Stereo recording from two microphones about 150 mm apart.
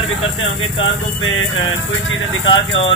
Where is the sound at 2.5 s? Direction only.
35° left (ahead or behind).